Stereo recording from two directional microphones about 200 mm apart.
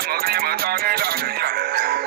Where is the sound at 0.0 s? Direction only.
50° right (ahead or behind).